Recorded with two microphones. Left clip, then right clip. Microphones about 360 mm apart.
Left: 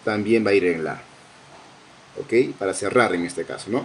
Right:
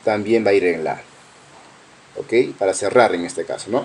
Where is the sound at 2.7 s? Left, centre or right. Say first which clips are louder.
Right 5 dB; right.